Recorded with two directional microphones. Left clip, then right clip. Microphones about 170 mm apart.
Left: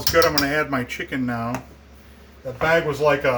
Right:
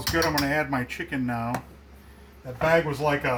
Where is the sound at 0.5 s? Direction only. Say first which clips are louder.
Left 4 dB; 25° left (ahead or behind).